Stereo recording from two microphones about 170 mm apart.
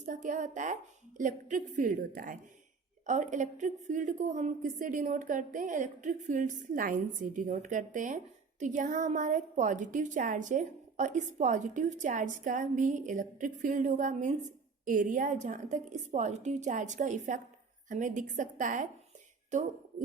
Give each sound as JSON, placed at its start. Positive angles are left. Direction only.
{"t": 0.0, "sound": "a woman's voice", "side_deg": -50}